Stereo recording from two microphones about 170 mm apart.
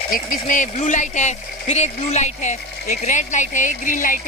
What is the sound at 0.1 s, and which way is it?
Speech, 50° left (ahead or behind).